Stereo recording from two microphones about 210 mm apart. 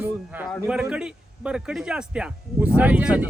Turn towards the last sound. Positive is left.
turn(degrees=-5)  # may be behind; listen again after turning